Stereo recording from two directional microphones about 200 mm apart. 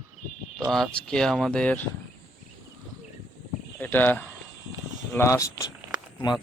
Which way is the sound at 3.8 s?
10° left (ahead or behind).